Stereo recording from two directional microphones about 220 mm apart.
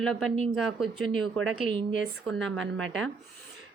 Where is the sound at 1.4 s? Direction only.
60° right (ahead or behind).